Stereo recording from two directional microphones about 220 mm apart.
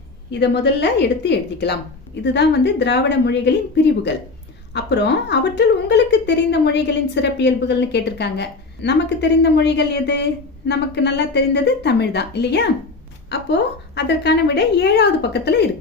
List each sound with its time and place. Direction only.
0.3 s a woman's voice: 50° left (ahead or behind)
4.7 s a woman's voice: 50° left (ahead or behind)